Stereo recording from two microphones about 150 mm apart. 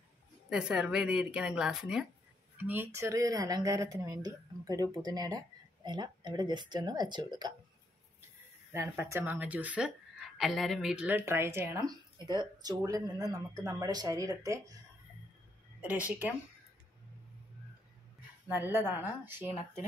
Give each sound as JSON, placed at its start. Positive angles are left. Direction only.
{"t": 0.5, "sound": "speech", "side_deg": -5}
{"t": 8.7, "sound": "a woman's voice", "side_deg": -15}
{"t": 15.8, "sound": "a woman's voice", "side_deg": -10}
{"t": 18.5, "sound": "a woman's voice", "side_deg": -15}